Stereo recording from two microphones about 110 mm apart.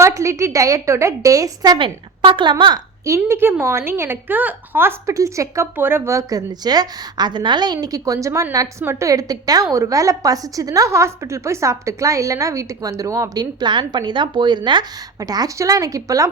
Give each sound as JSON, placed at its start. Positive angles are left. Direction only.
{"t": 0.0, "sound": "a woman's voice", "side_deg": -30}
{"t": 1.8, "sound": "a woman's voice", "side_deg": -50}
{"t": 3.0, "sound": "a woman's voice", "side_deg": -25}